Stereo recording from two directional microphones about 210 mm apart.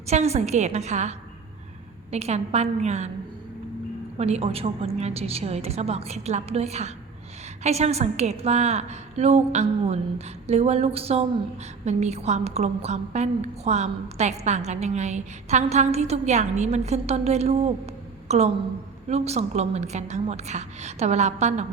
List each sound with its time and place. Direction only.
0.1 s a woman's voice: 30° right (ahead or behind)
4.2 s a woman's voice: 30° right (ahead or behind)